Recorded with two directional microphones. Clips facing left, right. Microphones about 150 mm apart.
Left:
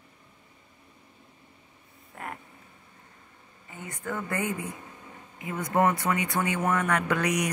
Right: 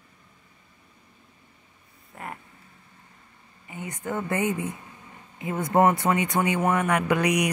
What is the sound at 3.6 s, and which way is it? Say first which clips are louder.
Speech: right 3 dB; 20° right (ahead or behind).